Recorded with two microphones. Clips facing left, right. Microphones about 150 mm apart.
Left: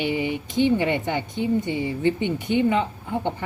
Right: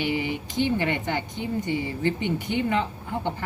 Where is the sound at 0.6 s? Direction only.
15° left (ahead or behind).